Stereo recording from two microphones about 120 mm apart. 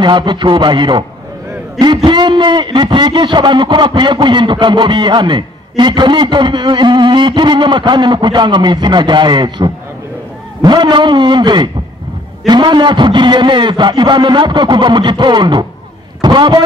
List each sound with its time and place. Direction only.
0.0 s a man's voice: 40° right (ahead or behind)
2.0 s a man's voice: 40° right (ahead or behind)